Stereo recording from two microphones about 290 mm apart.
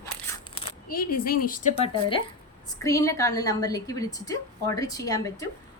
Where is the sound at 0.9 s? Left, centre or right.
Left.